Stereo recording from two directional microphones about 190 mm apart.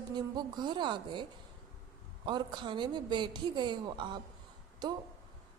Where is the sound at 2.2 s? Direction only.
25° right (ahead or behind).